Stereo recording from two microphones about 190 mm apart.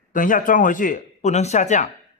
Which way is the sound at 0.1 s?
45° left (ahead or behind).